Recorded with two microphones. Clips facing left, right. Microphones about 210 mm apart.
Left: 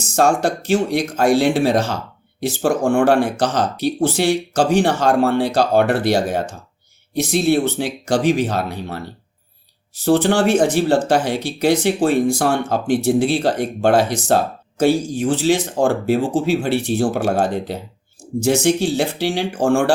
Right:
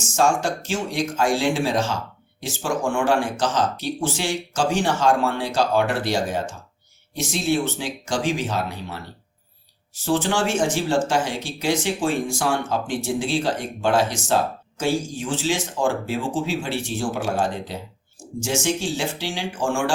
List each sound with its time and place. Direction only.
0.4 s speech: 60° left (ahead or behind)
10.0 s speech: 60° left (ahead or behind)